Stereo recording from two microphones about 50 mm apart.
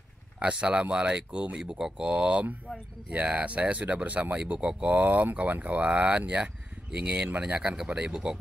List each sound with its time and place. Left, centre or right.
0.4 s speech: right
2.0 s speech: right
7.7 s speech: centre